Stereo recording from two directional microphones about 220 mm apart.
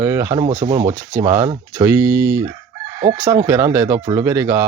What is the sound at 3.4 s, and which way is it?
Speech, 10° right (ahead or behind).